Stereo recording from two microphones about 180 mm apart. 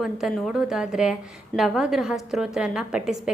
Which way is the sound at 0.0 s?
Centre (ahead or behind).